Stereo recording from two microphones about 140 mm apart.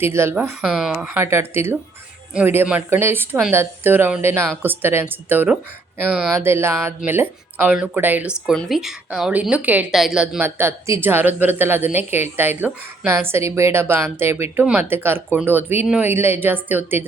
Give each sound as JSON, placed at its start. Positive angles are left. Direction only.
{"t": 0.0, "sound": "speech", "side_deg": -20}
{"t": 0.6, "sound": "speech", "side_deg": -5}
{"t": 8.4, "sound": "speech", "side_deg": 0}